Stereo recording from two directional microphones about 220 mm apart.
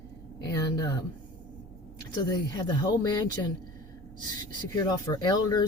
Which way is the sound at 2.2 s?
20° left (ahead or behind).